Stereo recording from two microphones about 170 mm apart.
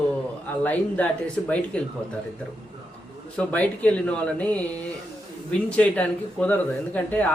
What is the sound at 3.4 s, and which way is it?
Speech, 10° left (ahead or behind).